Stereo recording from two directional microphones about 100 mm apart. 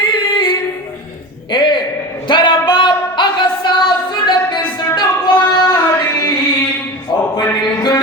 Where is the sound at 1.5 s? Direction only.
50° left (ahead or behind).